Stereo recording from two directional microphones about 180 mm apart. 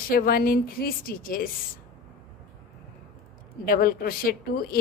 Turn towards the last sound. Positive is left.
turn(degrees=55)  # may be behind; listen again after turning